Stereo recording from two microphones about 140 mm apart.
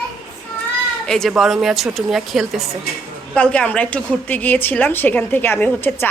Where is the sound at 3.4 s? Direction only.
10° left (ahead or behind).